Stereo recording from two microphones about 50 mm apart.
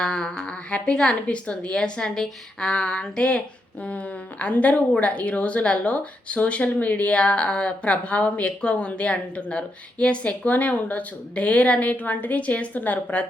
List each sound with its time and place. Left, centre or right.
0.0 s a woman's voice: centre; by 13.2 s left